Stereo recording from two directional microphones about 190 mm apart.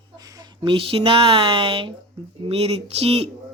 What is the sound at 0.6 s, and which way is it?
Speech, 25° right (ahead or behind).